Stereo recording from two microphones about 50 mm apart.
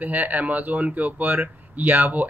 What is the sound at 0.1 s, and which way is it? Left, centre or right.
Speech, right.